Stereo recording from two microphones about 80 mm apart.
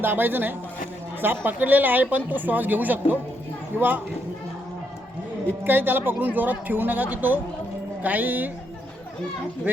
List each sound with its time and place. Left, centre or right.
0.0 s speech: right
5.6 s speech: right